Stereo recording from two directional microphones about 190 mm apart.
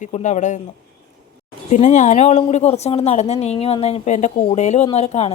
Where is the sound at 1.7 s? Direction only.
40° left (ahead or behind).